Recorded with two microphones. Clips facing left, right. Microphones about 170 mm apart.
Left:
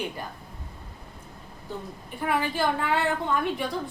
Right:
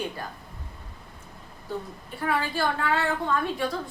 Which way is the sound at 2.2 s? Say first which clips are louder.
Left 1 dB; 15° left (ahead or behind).